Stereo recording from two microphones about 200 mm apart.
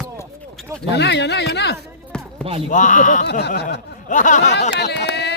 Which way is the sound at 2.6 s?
40° left (ahead or behind).